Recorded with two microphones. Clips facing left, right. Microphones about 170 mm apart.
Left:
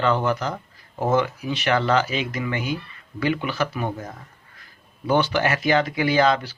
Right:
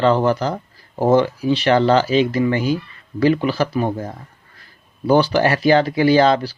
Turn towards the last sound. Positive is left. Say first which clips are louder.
# right 6 dB
turn(degrees=-30)  # may be behind; listen again after turning